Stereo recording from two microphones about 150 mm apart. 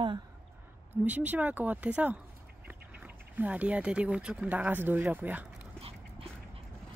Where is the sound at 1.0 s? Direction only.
10° right (ahead or behind).